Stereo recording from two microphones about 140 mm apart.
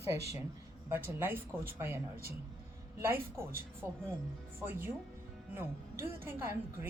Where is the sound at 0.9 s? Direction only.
15° right (ahead or behind).